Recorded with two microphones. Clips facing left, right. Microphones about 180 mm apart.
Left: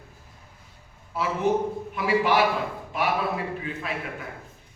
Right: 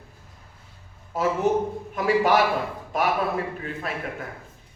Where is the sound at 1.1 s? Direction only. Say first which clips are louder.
Right 2 dB; 40° right (ahead or behind).